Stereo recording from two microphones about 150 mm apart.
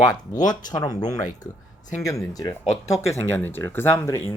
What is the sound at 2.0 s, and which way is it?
Speech, 20° left (ahead or behind).